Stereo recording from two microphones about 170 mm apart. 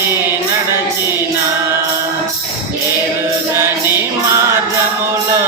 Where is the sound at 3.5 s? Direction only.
15° right (ahead or behind).